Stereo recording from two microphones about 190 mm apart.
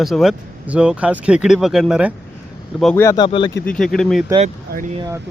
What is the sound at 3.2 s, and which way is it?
Speech, 25° left (ahead or behind).